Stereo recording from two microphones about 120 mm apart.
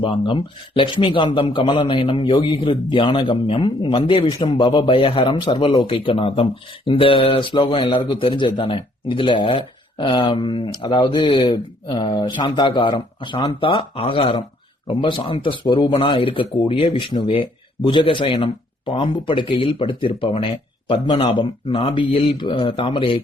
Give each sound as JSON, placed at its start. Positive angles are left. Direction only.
{"t": 0.0, "sound": "a man's voice", "side_deg": 45}